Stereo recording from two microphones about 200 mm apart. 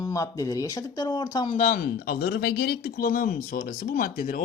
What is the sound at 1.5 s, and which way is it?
Speech, 35° left (ahead or behind).